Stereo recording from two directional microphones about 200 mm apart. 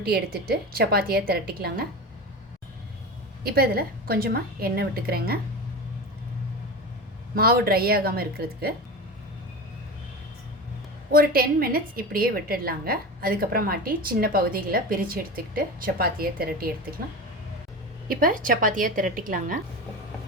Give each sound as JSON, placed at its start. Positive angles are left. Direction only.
{"t": 0.0, "sound": "a woman's voice", "side_deg": -50}
{"t": 3.4, "sound": "a woman's voice", "side_deg": -50}
{"t": 7.3, "sound": "a woman's voice", "side_deg": -50}
{"t": 11.1, "sound": "a woman's voice", "side_deg": -45}